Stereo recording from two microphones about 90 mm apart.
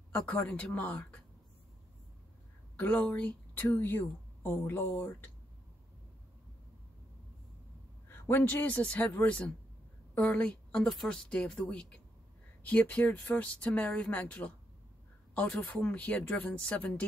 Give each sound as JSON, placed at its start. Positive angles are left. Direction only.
{"t": 0.5, "sound": "a woman's voice", "side_deg": 10}
{"t": 2.8, "sound": "a woman's voice", "side_deg": 15}
{"t": 8.1, "sound": "a woman's voice", "side_deg": 20}